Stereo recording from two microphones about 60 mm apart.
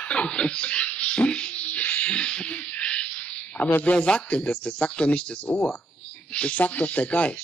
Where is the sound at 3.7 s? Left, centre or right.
Left.